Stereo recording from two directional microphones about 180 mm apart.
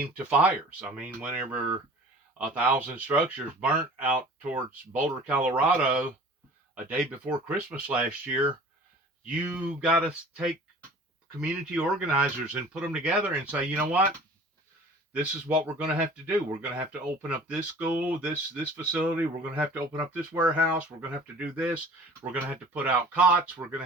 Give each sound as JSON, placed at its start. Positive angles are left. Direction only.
{"t": 0.0, "sound": "speech", "side_deg": -10}
{"t": 7.3, "sound": "speech", "side_deg": -10}
{"t": 15.1, "sound": "speech", "side_deg": -10}